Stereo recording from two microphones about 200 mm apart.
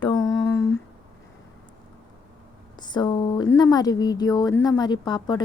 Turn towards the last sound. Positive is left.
turn(degrees=20)  # may be behind; listen again after turning